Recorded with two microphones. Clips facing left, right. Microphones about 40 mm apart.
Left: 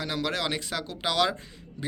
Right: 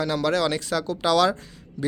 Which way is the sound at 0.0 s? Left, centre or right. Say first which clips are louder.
Right 7 dB; centre.